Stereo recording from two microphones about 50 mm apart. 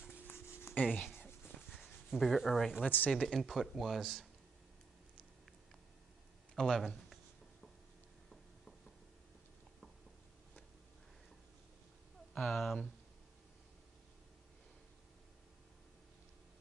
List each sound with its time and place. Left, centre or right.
0.3 s a sound: left
1.8 s speech: centre
2.8 s speech: left
3.3 s speech: centre
6.5 s speech: centre
12.4 s speech: centre